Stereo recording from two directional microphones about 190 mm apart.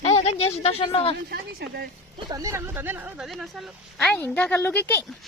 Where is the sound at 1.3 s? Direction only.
55° right (ahead or behind).